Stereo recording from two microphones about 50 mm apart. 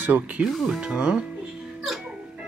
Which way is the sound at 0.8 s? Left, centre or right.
Centre.